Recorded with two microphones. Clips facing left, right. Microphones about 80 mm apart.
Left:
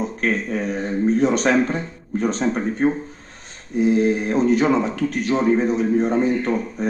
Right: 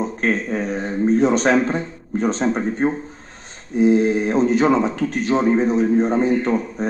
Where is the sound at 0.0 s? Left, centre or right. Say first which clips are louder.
Right 1 dB; right.